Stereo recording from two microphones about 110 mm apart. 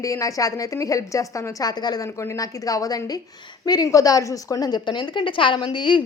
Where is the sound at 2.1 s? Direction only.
25° left (ahead or behind); by 6.0 s 45° left (ahead or behind).